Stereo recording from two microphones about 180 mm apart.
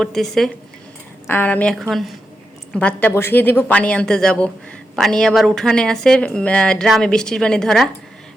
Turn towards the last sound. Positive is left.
turn(degrees=5)  # may be behind; listen again after turning